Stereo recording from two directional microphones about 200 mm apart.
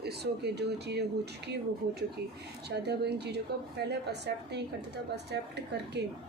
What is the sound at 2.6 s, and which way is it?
A woman's voice, 55° right (ahead or behind).